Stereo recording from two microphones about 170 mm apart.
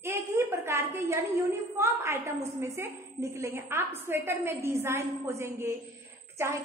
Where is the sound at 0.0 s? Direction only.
15° right (ahead or behind).